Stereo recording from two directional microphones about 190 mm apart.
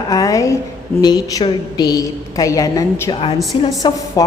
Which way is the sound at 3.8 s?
20° left (ahead or behind).